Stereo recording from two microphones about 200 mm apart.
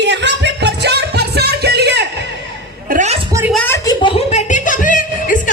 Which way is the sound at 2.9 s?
35° right (ahead or behind).